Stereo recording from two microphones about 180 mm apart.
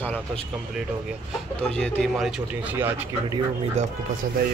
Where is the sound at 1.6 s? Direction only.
5° left (ahead or behind).